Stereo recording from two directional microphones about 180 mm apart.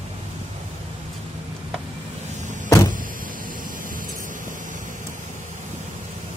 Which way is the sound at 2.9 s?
50° right (ahead or behind).